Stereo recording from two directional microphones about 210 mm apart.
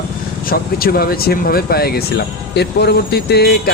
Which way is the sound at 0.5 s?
45° left (ahead or behind).